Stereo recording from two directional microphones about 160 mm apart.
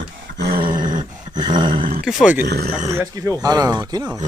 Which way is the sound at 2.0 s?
Centre (ahead or behind).